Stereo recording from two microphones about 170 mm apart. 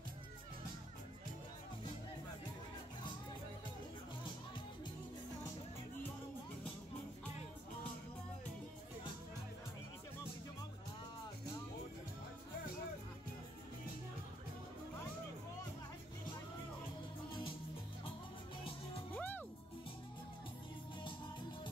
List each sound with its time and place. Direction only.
17.3 s music: 30° left (ahead or behind)
19.1 s music: 10° left (ahead or behind)